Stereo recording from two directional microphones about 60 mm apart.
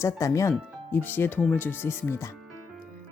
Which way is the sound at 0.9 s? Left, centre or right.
Left.